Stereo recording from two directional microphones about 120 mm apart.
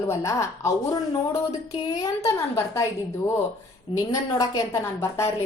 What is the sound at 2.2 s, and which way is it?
Speech, 25° left (ahead or behind).